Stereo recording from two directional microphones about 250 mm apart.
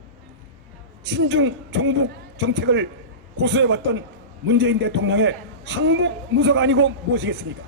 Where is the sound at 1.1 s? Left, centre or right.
Right.